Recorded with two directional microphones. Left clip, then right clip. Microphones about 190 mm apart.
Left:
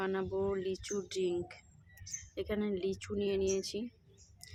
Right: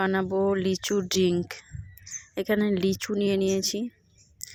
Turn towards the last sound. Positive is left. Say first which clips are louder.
# right 8 dB
turn(degrees=-40)  # may be behind; listen again after turning